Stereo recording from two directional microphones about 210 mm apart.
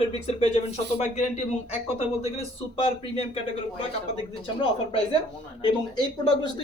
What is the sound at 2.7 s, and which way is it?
Speech, 25° left (ahead or behind).